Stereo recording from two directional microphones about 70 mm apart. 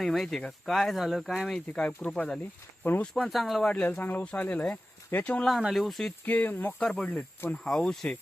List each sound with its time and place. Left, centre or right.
0.0 s speech: centre
1.5 s speech: centre
3.2 s speech: centre
3.6 s speech: centre
5.5 s speech: centre
6.2 s speech: left
6.8 s speech: centre